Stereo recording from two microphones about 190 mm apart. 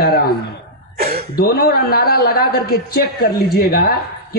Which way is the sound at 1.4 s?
55° left (ahead or behind).